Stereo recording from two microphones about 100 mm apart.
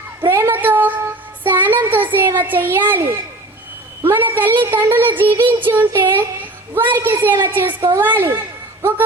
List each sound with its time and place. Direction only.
0.3 s a sound: 25° right (ahead or behind)
1.5 s child singing: 20° right (ahead or behind)
2.1 s a man's voice: 25° right (ahead or behind)